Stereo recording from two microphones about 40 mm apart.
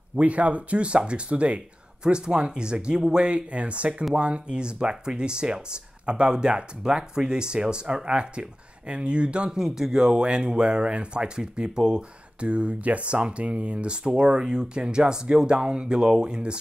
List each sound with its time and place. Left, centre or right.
0.2 s speech: right